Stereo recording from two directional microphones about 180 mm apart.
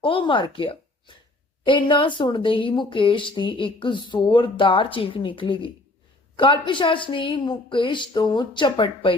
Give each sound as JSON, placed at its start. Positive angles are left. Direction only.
{"t": 0.0, "sound": "a woman's voice", "side_deg": 30}